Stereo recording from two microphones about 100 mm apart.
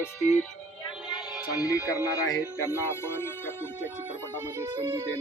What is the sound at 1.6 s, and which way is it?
Speech, 30° left (ahead or behind).